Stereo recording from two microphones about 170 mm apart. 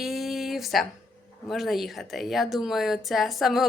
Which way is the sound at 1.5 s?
Centre (ahead or behind).